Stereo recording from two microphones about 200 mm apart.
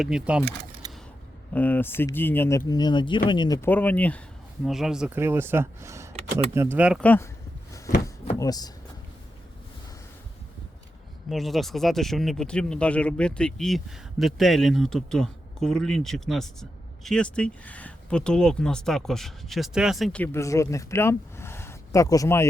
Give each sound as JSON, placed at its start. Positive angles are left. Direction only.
{"t": 0.0, "sound": "speech", "side_deg": -5}
{"t": 1.5, "sound": "speech", "side_deg": 10}
{"t": 7.0, "sound": "speech", "side_deg": 10}
{"t": 8.4, "sound": "speech", "side_deg": 20}
{"t": 11.3, "sound": "speech", "side_deg": 0}